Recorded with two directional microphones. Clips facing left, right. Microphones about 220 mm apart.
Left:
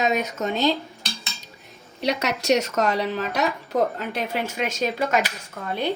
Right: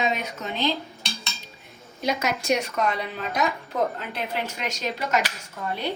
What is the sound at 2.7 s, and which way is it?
Speech, 90° left.